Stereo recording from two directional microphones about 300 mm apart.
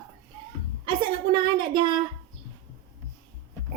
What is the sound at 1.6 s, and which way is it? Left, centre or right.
Speech, centre.